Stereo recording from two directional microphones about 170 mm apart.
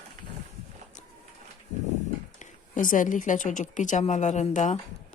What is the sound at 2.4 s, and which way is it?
Speech, 50° left (ahead or behind).